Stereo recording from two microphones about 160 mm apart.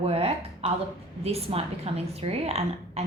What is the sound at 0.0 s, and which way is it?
A woman's voice, 40° right (ahead or behind).